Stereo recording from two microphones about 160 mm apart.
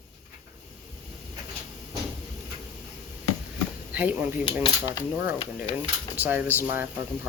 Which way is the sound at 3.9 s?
10° right (ahead or behind).